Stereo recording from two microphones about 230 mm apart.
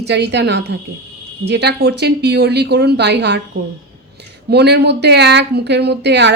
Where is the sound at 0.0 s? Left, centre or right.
Right.